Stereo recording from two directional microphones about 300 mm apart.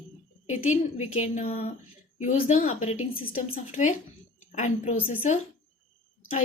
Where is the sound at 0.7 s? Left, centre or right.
Left.